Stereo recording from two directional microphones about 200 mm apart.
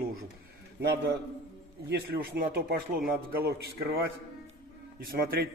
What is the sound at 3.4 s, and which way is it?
Speech, 50° right (ahead or behind).